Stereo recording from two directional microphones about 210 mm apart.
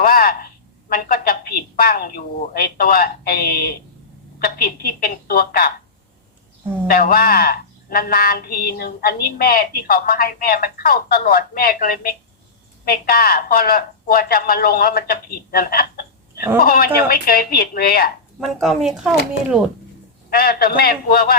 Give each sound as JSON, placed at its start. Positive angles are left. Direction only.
{"t": 0.0, "sound": "a woman's voice", "side_deg": 45}
{"t": 6.8, "sound": "a woman's voice", "side_deg": 45}
{"t": 18.3, "sound": "speech", "side_deg": 0}
{"t": 20.3, "sound": "a woman's voice", "side_deg": 45}